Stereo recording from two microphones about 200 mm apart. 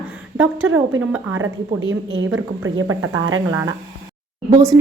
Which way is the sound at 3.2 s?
90° right.